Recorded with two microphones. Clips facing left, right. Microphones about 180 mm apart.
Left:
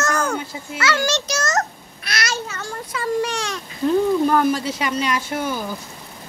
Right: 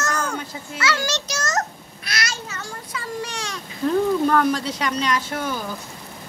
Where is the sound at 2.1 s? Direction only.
65° left (ahead or behind).